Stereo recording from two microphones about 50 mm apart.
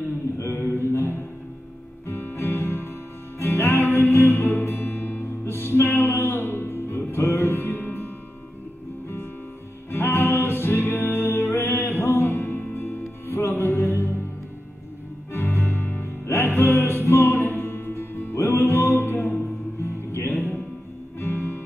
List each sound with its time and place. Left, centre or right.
0.4 s a sound: left
2.0 s music: left
5.4 s music: left
9.8 s music: left
15.3 s music: left
19.8 s music: left